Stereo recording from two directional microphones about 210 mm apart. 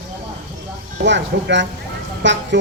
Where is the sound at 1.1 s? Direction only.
60° right (ahead or behind).